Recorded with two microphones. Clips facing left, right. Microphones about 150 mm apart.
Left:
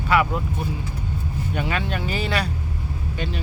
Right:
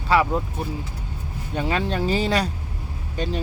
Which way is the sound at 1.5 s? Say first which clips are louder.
Right 3 dB; 30° right (ahead or behind).